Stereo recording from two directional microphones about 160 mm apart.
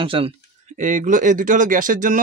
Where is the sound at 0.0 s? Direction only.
35° right (ahead or behind).